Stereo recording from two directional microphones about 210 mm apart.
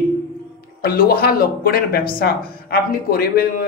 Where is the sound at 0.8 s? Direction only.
45° left (ahead or behind).